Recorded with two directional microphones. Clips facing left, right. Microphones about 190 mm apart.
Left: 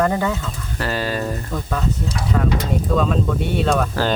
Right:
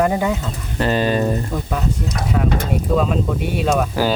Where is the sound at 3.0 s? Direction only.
5° right (ahead or behind).